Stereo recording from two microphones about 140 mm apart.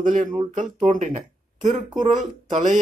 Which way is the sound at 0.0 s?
70° right (ahead or behind).